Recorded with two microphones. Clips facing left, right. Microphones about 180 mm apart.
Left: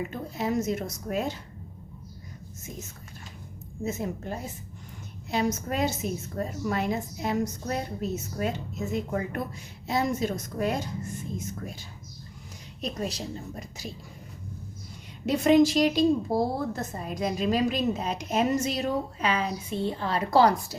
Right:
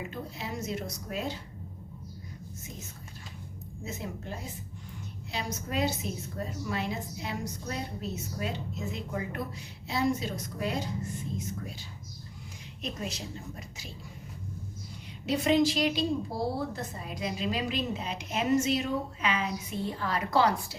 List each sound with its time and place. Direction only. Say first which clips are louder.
0.3 s a woman's voice: left 10 dB; 45° left (ahead or behind)
3.8 s a woman's voice: left 7 dB; 45° left (ahead or behind)
12.8 s a woman's voice: left 5 dB; 35° left (ahead or behind)
15.3 s a woman's voice: left 5 dB; 45° left (ahead or behind)